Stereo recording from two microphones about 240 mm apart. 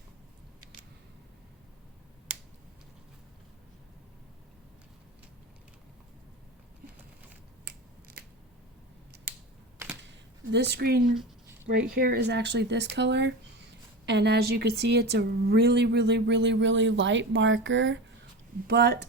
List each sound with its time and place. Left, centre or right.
10.5 s a woman's voice: right